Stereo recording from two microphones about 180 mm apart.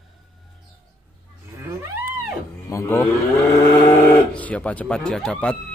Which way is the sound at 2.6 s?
15° left (ahead or behind).